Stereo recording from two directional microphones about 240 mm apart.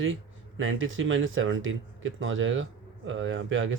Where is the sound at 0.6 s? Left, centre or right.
Right.